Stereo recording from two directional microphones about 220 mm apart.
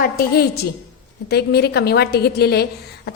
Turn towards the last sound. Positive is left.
turn(degrees=45)  # may be behind; listen again after turning